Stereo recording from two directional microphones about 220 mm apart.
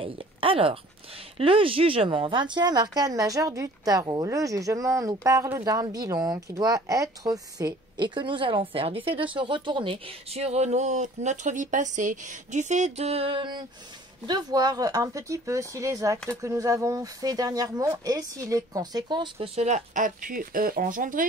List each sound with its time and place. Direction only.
0.0 s a woman's voice: 25° right (ahead or behind)